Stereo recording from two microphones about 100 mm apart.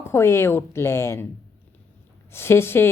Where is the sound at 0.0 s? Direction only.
25° left (ahead or behind).